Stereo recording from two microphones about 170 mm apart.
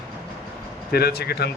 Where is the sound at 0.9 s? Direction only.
65° left (ahead or behind).